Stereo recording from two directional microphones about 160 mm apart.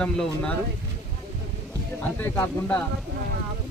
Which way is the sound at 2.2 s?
15° left (ahead or behind).